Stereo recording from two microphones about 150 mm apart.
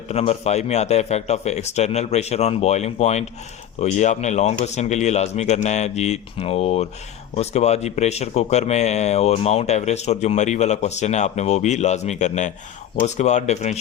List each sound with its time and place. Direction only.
0.1 s speech: 45° left (ahead or behind)